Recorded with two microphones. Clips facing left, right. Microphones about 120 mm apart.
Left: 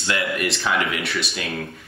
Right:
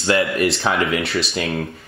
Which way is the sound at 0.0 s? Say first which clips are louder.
Right 6 dB; 30° right (ahead or behind).